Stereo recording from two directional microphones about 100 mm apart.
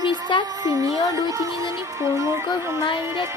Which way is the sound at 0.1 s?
50° left (ahead or behind).